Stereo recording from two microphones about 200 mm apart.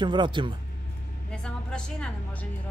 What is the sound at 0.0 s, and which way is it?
Speech, 25° right (ahead or behind).